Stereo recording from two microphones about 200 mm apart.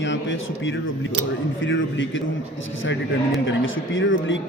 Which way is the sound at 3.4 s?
75° left (ahead or behind).